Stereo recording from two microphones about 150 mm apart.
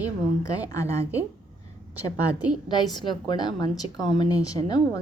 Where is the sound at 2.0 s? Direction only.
10° right (ahead or behind).